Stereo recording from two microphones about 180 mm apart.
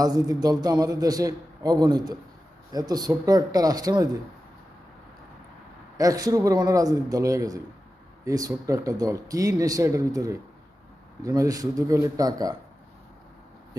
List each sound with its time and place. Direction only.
0.0 s a man's voice: 20° right (ahead or behind)
6.0 s a man's voice: 20° right (ahead or behind)